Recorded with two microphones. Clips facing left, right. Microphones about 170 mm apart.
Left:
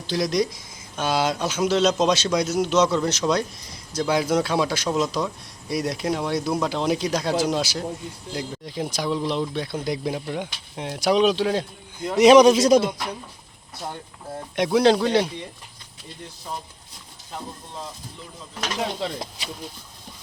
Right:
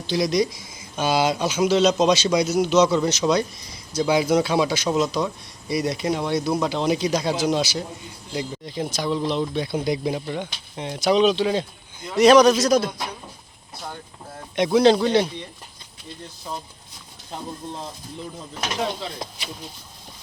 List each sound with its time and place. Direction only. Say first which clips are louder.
0.1 s speech: right 2 dB; centre (ahead or behind)
12.1 s speech: left 1 dB; 20° left (ahead or behind)
14.5 s speech: right 2 dB; 5° left (ahead or behind)